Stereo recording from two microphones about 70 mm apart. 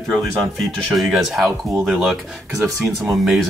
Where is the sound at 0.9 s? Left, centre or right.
Centre.